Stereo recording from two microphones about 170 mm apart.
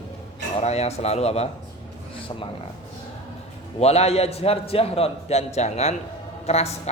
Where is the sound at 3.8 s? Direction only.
40° left (ahead or behind).